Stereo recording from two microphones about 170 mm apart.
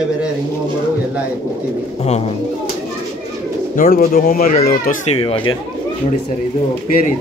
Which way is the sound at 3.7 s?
55° left (ahead or behind).